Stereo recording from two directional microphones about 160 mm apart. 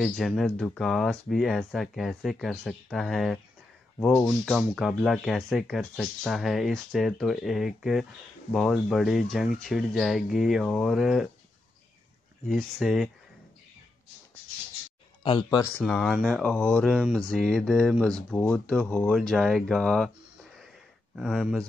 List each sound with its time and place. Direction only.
0.0 s speech: centre (ahead or behind)
4.5 s speech: centre (ahead or behind)
12.4 s speech: centre (ahead or behind)
15.2 s speech: 30° left (ahead or behind)
15.8 s speech: 5° left (ahead or behind)